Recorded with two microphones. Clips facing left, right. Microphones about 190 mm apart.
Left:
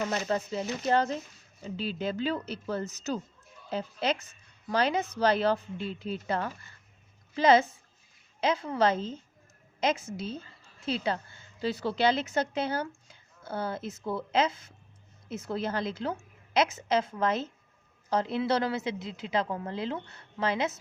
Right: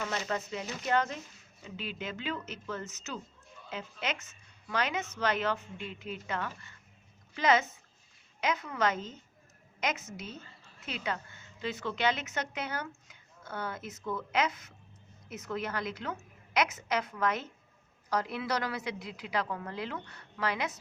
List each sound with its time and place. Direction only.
0.0 s a woman's voice: 35° left (ahead or behind)